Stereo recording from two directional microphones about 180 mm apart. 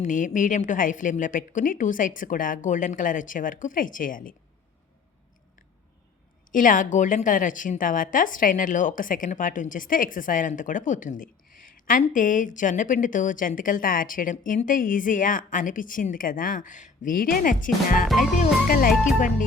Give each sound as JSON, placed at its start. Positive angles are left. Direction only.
{"t": 0.0, "sound": "a woman's voice", "side_deg": 45}
{"t": 6.5, "sound": "a woman's voice", "side_deg": 45}